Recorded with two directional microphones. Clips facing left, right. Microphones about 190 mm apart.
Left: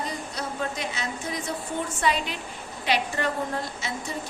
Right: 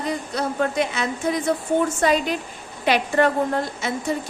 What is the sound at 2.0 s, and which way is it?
A woman's voice, 45° right (ahead or behind).